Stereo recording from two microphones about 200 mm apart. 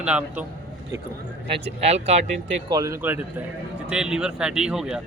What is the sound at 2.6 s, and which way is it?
A man's voice, 15° right (ahead or behind).